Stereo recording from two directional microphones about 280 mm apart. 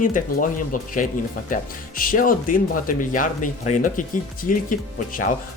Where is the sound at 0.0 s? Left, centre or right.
Left.